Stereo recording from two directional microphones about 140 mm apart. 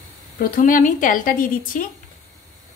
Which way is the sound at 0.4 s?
75° left (ahead or behind).